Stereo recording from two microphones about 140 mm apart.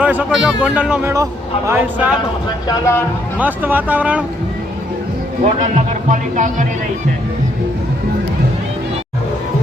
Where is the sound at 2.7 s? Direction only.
20° left (ahead or behind).